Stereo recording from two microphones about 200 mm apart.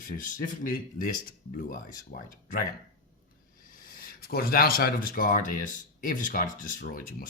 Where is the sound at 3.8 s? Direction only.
45° left (ahead or behind).